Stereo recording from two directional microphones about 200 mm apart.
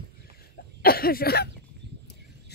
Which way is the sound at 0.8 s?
50° left (ahead or behind).